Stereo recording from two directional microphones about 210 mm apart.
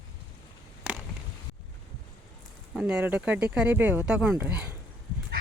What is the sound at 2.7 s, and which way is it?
Speech, 5° right (ahead or behind).